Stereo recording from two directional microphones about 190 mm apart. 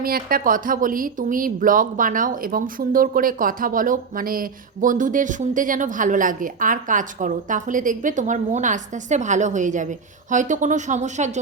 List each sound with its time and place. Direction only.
0.0 s a woman's voice: 50° right (ahead or behind)